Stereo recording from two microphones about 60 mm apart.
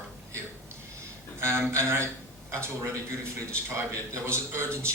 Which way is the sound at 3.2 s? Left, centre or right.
Right.